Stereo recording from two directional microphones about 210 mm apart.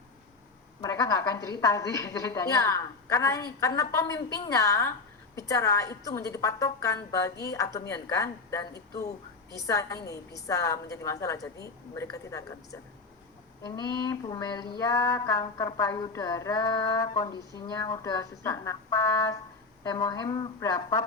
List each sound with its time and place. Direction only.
0.8 s a woman's voice: 15° left (ahead or behind)
9.6 s a woman's voice: 15° left (ahead or behind)